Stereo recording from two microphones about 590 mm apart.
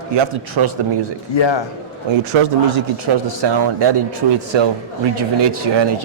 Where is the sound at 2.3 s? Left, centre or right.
Right.